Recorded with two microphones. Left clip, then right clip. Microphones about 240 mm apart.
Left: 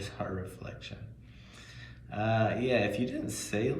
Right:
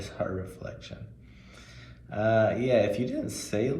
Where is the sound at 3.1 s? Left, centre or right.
Right.